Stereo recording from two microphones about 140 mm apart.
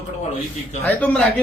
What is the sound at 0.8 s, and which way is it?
Speech, 10° left (ahead or behind).